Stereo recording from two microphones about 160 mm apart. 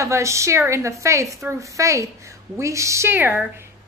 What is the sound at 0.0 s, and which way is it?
A woman's voice, 20° right (ahead or behind).